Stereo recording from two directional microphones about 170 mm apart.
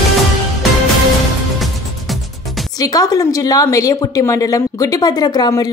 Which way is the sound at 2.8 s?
20° left (ahead or behind).